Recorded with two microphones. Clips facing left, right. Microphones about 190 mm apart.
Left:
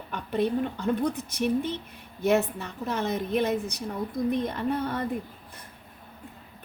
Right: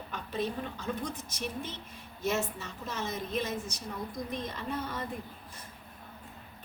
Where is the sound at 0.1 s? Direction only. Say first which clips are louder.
Left 8 dB; 60° left (ahead or behind).